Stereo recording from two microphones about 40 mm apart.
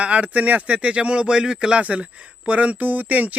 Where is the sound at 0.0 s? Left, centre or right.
Right.